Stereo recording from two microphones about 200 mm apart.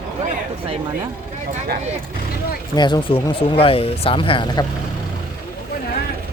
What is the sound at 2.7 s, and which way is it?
Speech, 20° left (ahead or behind).